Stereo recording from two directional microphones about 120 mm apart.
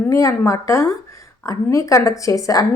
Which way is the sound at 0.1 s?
25° left (ahead or behind).